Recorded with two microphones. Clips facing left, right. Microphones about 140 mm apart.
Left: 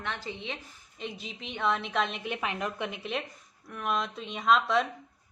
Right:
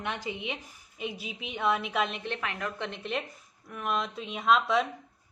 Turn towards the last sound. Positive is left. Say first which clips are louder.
# even
turn(degrees=0)  # may be behind; listen again after turning